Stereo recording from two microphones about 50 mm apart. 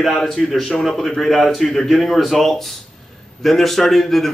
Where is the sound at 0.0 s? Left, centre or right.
Centre.